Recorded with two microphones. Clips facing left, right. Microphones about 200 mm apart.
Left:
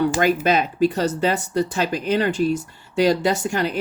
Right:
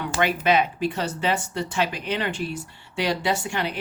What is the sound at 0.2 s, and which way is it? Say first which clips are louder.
Speech: left 3 dB; 40° left (ahead or behind).